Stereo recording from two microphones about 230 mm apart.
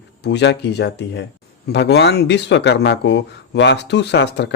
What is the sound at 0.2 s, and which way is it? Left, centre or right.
Speech, left.